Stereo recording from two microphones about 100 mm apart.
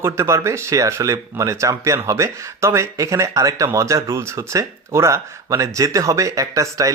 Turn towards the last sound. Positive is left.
turn(degrees=-35)  # may be behind; listen again after turning